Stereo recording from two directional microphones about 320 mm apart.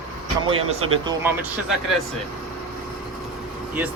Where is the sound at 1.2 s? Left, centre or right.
Centre.